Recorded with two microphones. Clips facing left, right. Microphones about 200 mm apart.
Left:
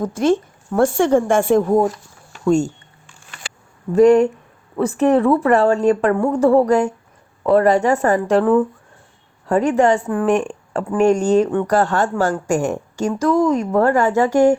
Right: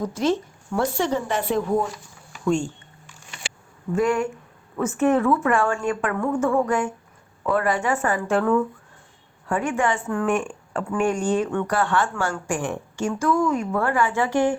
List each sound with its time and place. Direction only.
0.0 s a woman's voice: 50° left (ahead or behind)
3.9 s speech: 40° left (ahead or behind)